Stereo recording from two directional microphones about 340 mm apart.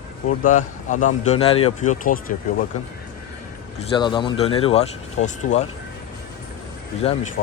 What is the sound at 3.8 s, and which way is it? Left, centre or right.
Speech, centre.